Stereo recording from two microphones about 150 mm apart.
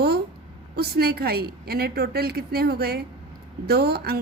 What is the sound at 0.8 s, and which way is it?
A woman's voice, 90° right.